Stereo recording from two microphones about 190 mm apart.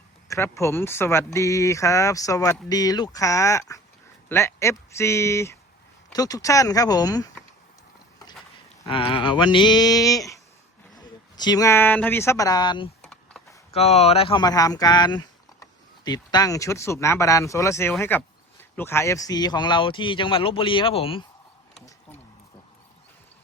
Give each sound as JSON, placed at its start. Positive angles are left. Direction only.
{"t": 0.3, "sound": "speech", "side_deg": 15}
{"t": 8.9, "sound": "speech", "side_deg": 25}
{"t": 13.0, "sound": "a sound", "side_deg": 5}
{"t": 13.7, "sound": "speech", "side_deg": 35}